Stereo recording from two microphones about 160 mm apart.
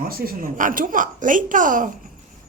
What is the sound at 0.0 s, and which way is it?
Speech, 65° right (ahead or behind).